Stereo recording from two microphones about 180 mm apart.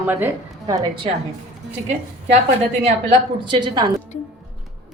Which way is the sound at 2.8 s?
30° right (ahead or behind).